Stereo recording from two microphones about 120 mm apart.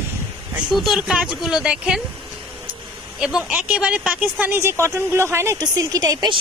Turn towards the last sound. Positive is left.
turn(degrees=-30)  # may be behind; listen again after turning